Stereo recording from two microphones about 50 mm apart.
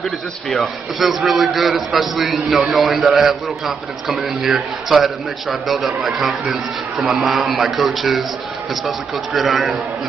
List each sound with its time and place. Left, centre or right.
0.0 s a man's voice: centre